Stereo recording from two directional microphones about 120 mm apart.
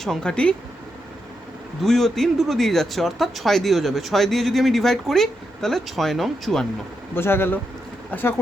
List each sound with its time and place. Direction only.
0.0 s speech: 5° left (ahead or behind)
1.8 s speech: centre (ahead or behind)
7.2 s a man's voice: 20° left (ahead or behind)